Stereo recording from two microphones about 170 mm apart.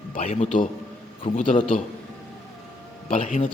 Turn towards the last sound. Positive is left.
turn(degrees=40)  # may be behind; listen again after turning